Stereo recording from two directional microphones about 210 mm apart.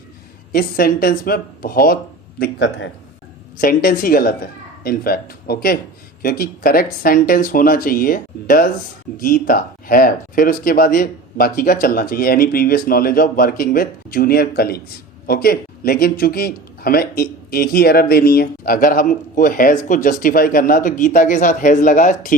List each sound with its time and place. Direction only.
0.5 s speech: 45° left (ahead or behind)
2.4 s speech: 60° left (ahead or behind)
3.6 s speech: 45° left (ahead or behind)